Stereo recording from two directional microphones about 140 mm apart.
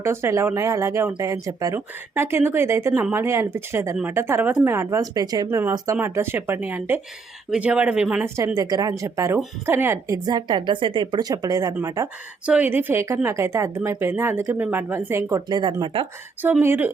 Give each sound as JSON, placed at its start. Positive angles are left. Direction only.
{"t": 0.0, "sound": "a woman's voice", "side_deg": -20}
{"t": 8.5, "sound": "speech", "side_deg": -25}
{"t": 12.5, "sound": "speech", "side_deg": -10}
{"t": 16.4, "sound": "a woman's voice", "side_deg": -15}